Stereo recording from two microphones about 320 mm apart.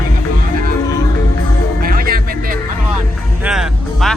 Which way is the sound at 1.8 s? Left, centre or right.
Right.